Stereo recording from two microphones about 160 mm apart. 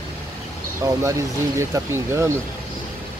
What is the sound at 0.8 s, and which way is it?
Speech, 20° right (ahead or behind).